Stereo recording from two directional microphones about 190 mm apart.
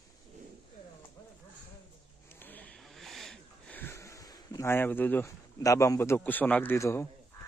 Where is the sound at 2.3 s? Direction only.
10° left (ahead or behind).